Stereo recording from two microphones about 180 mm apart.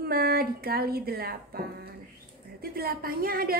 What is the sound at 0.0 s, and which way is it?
A woman's voice, 60° right (ahead or behind).